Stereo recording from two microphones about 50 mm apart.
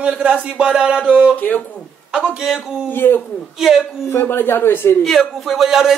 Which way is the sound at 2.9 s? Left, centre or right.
Left.